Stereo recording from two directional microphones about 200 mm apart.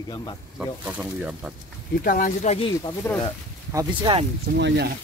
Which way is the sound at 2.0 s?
40° left (ahead or behind).